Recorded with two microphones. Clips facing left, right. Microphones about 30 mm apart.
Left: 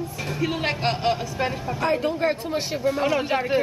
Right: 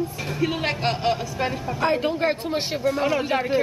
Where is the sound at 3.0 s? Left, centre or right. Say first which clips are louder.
Even; centre.